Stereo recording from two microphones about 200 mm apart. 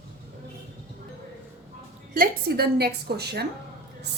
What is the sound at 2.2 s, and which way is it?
A woman's voice, 50° right (ahead or behind).